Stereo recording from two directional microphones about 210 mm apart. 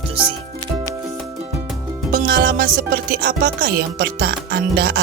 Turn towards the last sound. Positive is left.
turn(degrees=-45)  # may be behind; listen again after turning